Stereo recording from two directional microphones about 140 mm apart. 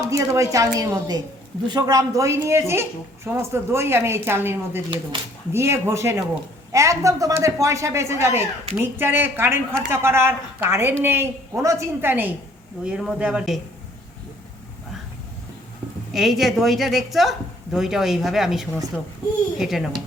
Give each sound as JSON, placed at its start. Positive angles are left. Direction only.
{"t": 0.1, "sound": "speech", "side_deg": -25}
{"t": 12.8, "sound": "a woman's voice", "side_deg": -5}
{"t": 16.1, "sound": "a woman's voice", "side_deg": 0}